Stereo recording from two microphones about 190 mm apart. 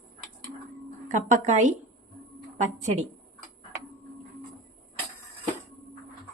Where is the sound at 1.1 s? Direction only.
40° right (ahead or behind).